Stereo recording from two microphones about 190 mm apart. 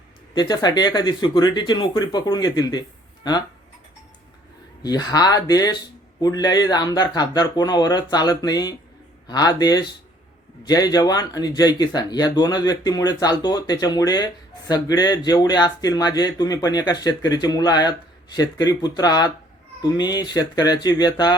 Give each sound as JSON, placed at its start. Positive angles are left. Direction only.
{"t": 0.3, "sound": "speech", "side_deg": 20}
{"t": 4.8, "sound": "speech", "side_deg": 20}